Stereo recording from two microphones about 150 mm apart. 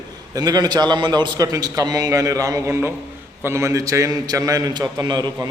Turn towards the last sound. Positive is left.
turn(degrees=-30)  # may be behind; listen again after turning